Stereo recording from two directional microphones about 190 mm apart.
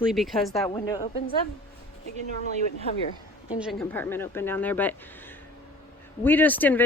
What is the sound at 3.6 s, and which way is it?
Speech, centre (ahead or behind).